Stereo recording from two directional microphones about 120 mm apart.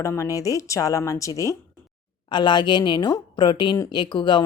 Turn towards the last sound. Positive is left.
turn(degrees=40)  # may be behind; listen again after turning